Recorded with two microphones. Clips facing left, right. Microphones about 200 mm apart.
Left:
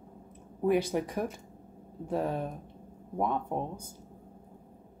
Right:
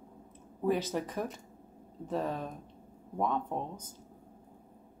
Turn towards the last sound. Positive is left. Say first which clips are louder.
# left 2 dB
turn(degrees=10)  # may be behind; listen again after turning